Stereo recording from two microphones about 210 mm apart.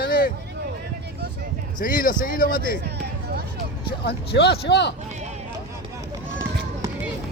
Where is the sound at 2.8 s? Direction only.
50° right (ahead or behind).